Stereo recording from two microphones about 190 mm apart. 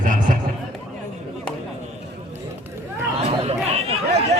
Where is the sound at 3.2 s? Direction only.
35° right (ahead or behind).